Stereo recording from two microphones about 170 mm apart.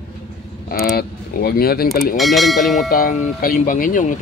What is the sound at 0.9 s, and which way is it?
Speech, 65° left (ahead or behind).